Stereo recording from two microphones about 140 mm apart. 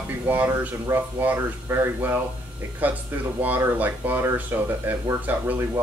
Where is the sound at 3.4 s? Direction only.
10° right (ahead or behind).